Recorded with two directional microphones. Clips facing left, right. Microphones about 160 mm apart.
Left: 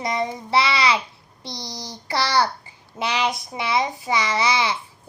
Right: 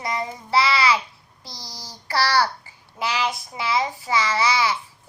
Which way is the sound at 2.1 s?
20° left (ahead or behind).